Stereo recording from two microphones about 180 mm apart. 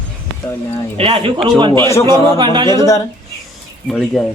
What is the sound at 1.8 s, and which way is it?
Speech, 15° left (ahead or behind).